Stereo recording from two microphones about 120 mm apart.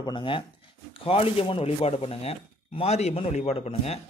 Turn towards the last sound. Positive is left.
turn(degrees=60)  # may be behind; listen again after turning